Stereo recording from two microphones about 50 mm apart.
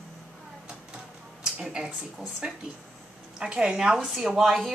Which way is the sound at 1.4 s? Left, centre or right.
Centre.